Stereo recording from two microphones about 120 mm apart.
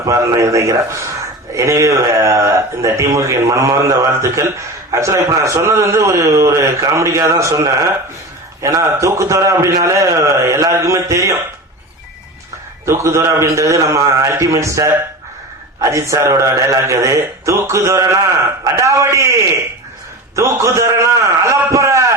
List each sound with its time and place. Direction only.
0.0 s speech: 30° right (ahead or behind)
12.8 s a man's voice: 25° right (ahead or behind)